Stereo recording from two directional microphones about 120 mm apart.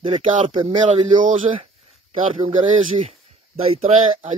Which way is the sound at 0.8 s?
90° right.